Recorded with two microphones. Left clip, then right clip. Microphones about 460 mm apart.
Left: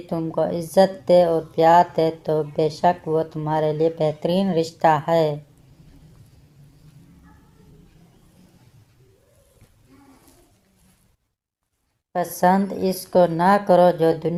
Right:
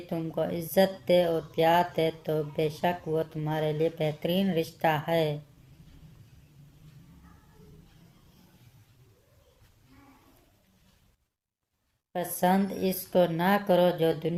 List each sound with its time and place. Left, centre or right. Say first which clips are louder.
0.1 s speech: left 8 dB; right
12.1 s speech: left 8 dB; right